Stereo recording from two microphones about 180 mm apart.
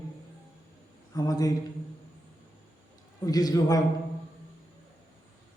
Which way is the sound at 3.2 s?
20° left (ahead or behind).